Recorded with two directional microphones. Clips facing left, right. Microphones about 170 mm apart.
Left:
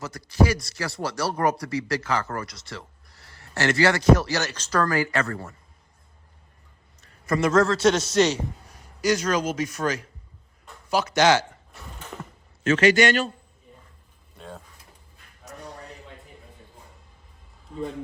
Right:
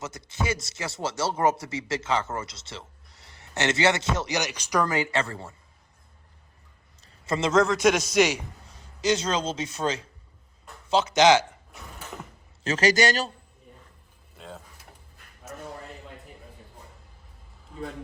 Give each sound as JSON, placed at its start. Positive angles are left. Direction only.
{"t": 0.0, "sound": "speech", "side_deg": -20}
{"t": 7.3, "sound": "a man's voice", "side_deg": -20}
{"t": 8.7, "sound": "speech", "side_deg": -25}
{"t": 10.8, "sound": "a sound", "side_deg": -20}
{"t": 12.6, "sound": "a man's voice", "side_deg": -40}
{"t": 14.3, "sound": "speech", "side_deg": 0}
{"t": 15.4, "sound": "a sound", "side_deg": 0}